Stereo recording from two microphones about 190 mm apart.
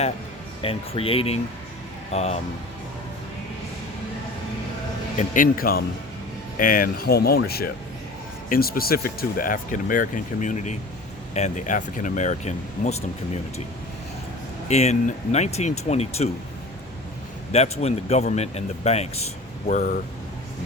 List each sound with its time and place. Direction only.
0.6 s speech: 30° left (ahead or behind)
5.1 s speech: 45° left (ahead or behind)
14.7 s speech: 35° left (ahead or behind)
17.5 s speech: 35° left (ahead or behind)